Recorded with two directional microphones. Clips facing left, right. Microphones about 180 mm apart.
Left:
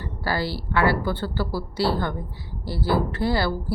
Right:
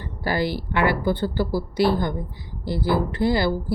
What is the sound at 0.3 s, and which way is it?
Speech, 15° right (ahead or behind).